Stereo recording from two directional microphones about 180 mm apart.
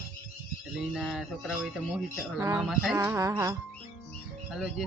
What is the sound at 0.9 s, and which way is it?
Music, centre (ahead or behind).